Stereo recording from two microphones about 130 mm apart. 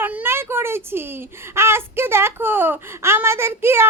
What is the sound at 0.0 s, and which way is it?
Speech, 15° right (ahead or behind).